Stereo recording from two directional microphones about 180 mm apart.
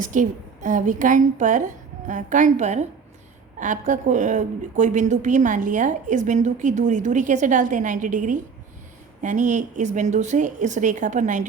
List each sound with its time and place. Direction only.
0.0 s a woman's voice: 45° right (ahead or behind)